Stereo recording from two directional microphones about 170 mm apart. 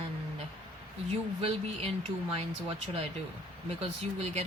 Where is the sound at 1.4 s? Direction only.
35° right (ahead or behind).